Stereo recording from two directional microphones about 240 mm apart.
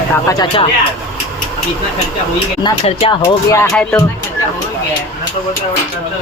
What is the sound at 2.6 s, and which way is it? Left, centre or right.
Speech, left.